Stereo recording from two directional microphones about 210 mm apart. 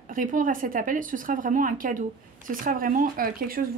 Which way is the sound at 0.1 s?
40° right (ahead or behind).